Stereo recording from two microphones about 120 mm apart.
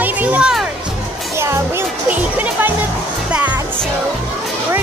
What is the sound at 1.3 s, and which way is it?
Music, 20° right (ahead or behind).